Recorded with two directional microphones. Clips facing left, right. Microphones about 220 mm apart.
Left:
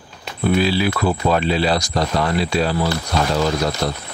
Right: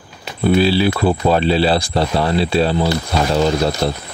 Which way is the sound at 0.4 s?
30° right (ahead or behind).